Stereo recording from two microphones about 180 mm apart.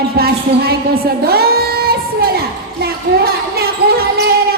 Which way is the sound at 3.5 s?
60° right (ahead or behind).